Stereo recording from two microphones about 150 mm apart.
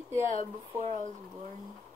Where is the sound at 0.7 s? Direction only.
45° right (ahead or behind).